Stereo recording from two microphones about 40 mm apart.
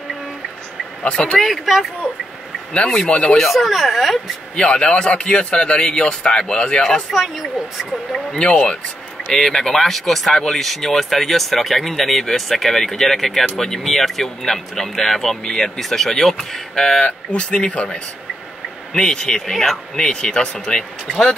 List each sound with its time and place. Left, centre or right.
1.0 s a man's voice: left
1.4 s speech: centre
2.7 s a man's voice: left
3.3 s speech: centre
4.6 s a man's voice: left
7.1 s speech: centre
8.3 s a man's voice: left
9.3 s speech: centre
17.0 s a man's voice: left
19.0 s speech: centre
20.0 s a man's voice: centre